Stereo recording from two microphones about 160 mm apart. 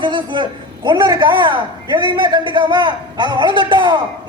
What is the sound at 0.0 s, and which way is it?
A man's voice, 30° right (ahead or behind).